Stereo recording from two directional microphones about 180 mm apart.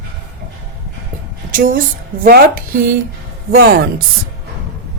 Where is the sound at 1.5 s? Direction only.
50° right (ahead or behind).